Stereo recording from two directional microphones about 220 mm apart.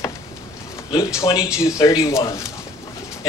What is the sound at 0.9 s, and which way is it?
A man's voice, 15° left (ahead or behind).